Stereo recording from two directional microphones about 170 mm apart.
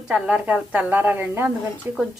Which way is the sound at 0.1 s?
5° right (ahead or behind).